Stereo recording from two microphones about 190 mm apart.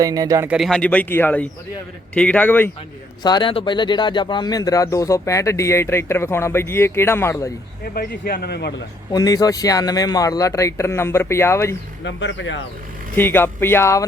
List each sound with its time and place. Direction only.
0.0 s speech: 20° right (ahead or behind)
0.4 s speech: centre (ahead or behind)
3.2 s speech: 25° left (ahead or behind)
7.9 s a man's voice: 55° left (ahead or behind)
9.1 s speech: 20° left (ahead or behind)
12.0 s speech: 70° left (ahead or behind)
13.1 s speech: 10° left (ahead or behind)